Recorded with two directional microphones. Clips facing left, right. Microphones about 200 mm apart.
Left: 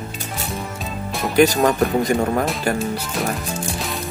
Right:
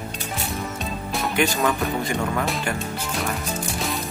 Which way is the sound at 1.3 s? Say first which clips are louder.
Left 8 dB; 40° left (ahead or behind).